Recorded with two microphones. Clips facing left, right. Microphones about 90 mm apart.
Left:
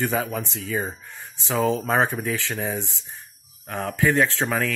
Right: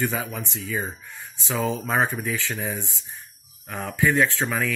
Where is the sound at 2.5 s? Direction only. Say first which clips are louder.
Left 2 dB; 30° left (ahead or behind).